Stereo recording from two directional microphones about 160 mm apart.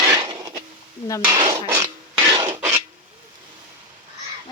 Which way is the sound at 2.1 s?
25° right (ahead or behind).